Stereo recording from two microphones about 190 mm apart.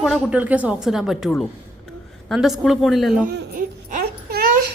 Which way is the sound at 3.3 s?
50° right (ahead or behind).